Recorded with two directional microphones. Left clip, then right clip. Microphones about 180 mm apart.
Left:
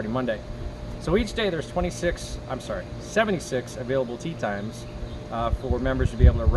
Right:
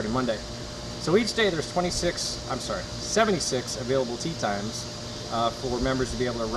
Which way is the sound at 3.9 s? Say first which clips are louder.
Even; 15° left (ahead or behind).